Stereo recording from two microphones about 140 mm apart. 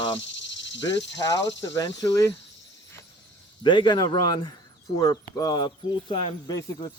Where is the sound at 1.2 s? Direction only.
25° left (ahead or behind).